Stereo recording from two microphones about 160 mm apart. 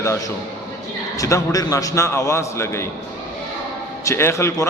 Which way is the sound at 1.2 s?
20° left (ahead or behind).